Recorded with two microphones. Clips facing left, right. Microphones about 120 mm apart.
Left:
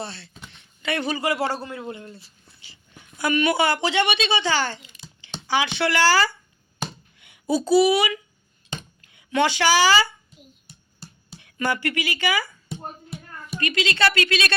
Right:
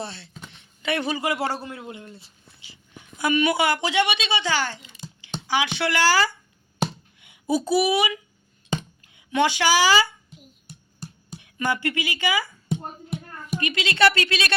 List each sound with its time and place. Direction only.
0.0 s a woman's voice: 15° right (ahead or behind)
11.3 s speech: 15° right (ahead or behind)
13.1 s music: 15° right (ahead or behind)